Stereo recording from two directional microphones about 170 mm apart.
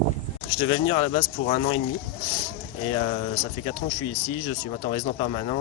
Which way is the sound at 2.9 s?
35° left (ahead or behind).